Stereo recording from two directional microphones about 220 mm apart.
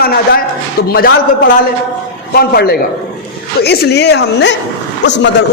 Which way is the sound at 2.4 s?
45° left (ahead or behind).